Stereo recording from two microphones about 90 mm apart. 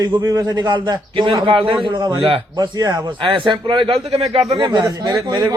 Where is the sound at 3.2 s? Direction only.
70° right (ahead or behind).